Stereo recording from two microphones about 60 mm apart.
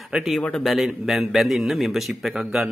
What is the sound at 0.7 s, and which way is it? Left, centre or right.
A man's voice, centre.